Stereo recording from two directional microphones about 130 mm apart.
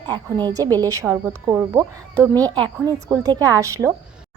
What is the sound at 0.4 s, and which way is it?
A woman's voice, 30° right (ahead or behind).